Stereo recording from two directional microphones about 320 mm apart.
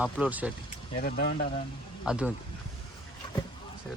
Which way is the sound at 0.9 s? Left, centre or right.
Left.